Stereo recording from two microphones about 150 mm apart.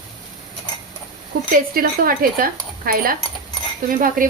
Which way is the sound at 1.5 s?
75° right (ahead or behind).